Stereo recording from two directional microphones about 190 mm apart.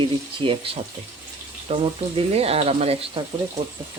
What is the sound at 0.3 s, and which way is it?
Speech, 25° right (ahead or behind).